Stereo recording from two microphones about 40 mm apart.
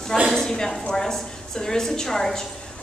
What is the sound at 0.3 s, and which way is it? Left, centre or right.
A woman's voice, centre.